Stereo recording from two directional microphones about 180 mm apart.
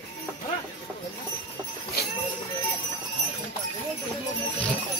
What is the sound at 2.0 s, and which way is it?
Jingle bell, 60° left (ahead or behind).